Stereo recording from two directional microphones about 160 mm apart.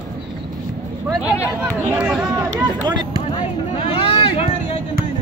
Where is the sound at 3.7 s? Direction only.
35° left (ahead or behind).